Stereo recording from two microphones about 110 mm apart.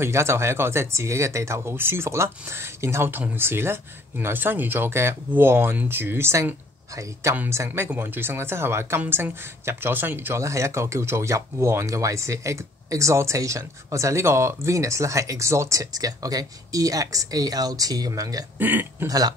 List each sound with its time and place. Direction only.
0.0 s speech: 25° right (ahead or behind)
18.6 s speech: 15° right (ahead or behind)
19.0 s speech: 35° right (ahead or behind)